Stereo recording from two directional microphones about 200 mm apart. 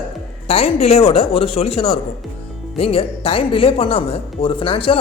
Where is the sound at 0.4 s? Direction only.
30° left (ahead or behind).